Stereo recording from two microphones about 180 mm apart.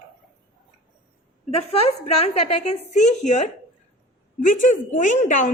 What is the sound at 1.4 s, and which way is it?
A woman's voice, 35° left (ahead or behind).